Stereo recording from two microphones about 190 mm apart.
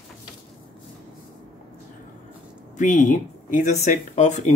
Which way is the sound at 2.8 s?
40° left (ahead or behind).